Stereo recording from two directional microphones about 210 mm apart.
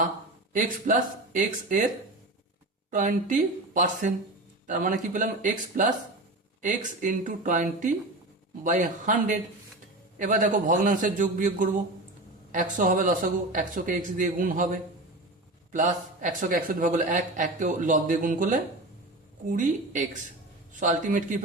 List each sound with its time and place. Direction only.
0.5 s a man's voice: 40° right (ahead or behind)
2.9 s a man's voice: 40° right (ahead or behind)